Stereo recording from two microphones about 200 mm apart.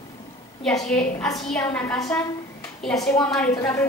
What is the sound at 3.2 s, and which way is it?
Speech, 5° left (ahead or behind).